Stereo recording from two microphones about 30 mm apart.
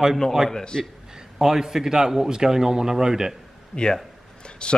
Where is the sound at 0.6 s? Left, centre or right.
Left.